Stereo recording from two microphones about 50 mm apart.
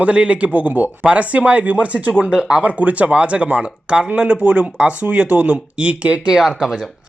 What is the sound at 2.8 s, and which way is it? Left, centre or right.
Speech, right.